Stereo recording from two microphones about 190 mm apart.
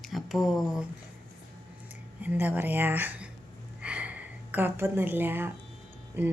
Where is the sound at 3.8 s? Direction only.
5° right (ahead or behind).